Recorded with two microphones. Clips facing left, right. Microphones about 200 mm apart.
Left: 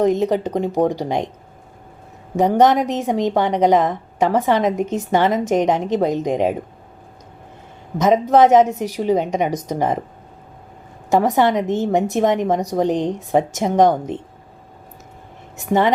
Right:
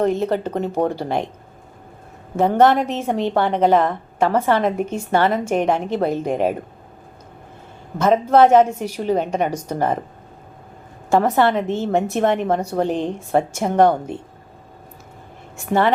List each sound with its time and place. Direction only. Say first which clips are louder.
0.0 s a woman's voice: left 2 dB; 15° left (ahead or behind)
2.3 s a woman's voice: left 1 dB; 15° left (ahead or behind)
7.9 s a woman's voice: left 1 dB; 15° left (ahead or behind)
11.1 s a woman's voice: left 1 dB; 15° left (ahead or behind)
15.5 s a woman's voice: left 1 dB; 15° left (ahead or behind)